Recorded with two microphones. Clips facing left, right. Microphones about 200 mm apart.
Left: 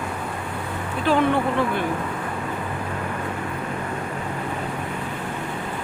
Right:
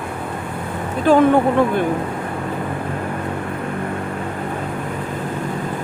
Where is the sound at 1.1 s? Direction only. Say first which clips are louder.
Right 7 dB; 45° right (ahead or behind).